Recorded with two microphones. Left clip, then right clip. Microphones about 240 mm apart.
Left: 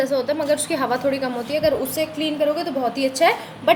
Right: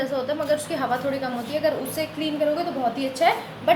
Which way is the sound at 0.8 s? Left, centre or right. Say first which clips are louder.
Left 4 dB; left.